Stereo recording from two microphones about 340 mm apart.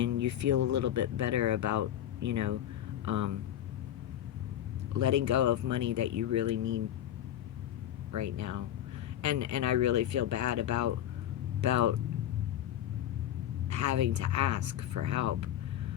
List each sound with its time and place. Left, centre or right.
0.0 s speech: right
4.9 s speech: right
8.1 s speech: right
13.7 s speech: right